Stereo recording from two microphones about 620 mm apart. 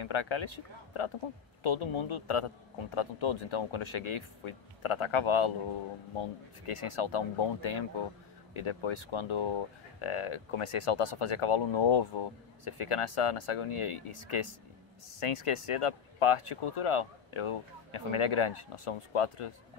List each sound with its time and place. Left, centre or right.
0.0 s speech: left
1.6 s speech: left
6.6 s speech: left